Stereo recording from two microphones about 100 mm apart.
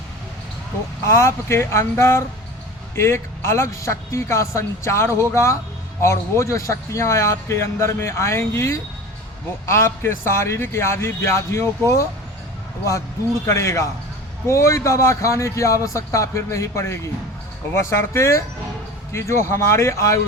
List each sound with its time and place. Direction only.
1.0 s speech: 25° left (ahead or behind)
13.4 s a man's voice: 30° left (ahead or behind)